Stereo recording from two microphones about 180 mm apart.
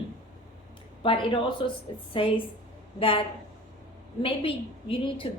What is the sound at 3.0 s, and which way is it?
A woman's voice, 30° left (ahead or behind).